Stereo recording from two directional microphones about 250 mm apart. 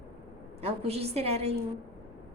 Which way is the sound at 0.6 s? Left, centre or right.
Right.